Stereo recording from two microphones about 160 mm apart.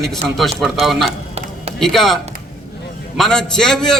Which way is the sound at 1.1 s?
40° right (ahead or behind).